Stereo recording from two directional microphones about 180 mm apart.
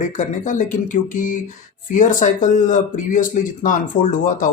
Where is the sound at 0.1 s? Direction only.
45° left (ahead or behind).